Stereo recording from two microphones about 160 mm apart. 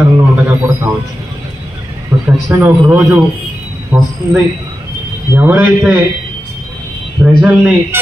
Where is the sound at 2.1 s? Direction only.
20° right (ahead or behind).